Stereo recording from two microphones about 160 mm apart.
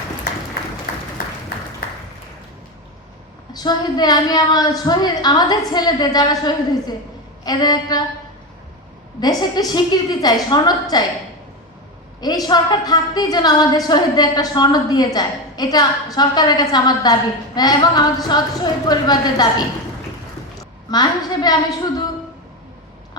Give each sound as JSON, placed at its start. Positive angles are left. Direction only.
{"t": 3.5, "sound": "a woman's voice", "side_deg": 25}
{"t": 9.2, "sound": "a woman's voice", "side_deg": 25}
{"t": 12.2, "sound": "a woman's voice", "side_deg": 25}
{"t": 20.9, "sound": "a woman's voice", "side_deg": 25}